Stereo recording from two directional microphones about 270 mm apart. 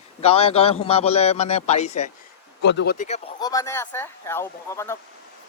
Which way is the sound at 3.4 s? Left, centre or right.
Centre.